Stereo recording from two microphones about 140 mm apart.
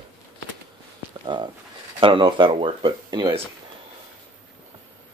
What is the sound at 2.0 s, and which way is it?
Speech, 35° right (ahead or behind).